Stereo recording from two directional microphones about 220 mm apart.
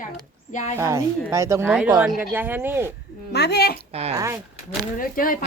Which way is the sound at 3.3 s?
50° left (ahead or behind).